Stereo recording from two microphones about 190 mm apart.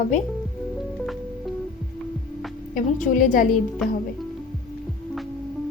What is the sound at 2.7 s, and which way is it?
Speech, 45° left (ahead or behind).